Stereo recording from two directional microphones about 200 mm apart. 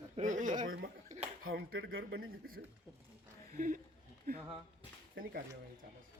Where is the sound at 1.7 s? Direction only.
75° right (ahead or behind).